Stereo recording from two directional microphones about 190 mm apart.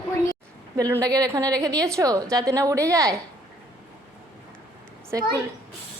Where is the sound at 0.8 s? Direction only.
15° right (ahead or behind).